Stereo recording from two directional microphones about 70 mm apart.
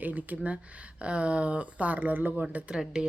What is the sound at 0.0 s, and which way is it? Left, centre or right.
Speech, right.